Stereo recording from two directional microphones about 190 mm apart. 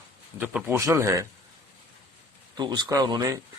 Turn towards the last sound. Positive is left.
turn(degrees=-20)  # may be behind; listen again after turning